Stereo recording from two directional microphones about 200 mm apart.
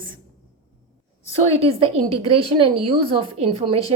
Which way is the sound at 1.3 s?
30° right (ahead or behind).